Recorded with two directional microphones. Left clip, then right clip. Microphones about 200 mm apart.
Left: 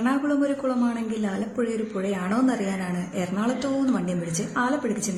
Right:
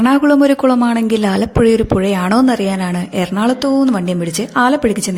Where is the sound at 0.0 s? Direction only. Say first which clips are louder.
Right 13 dB; 50° right (ahead or behind).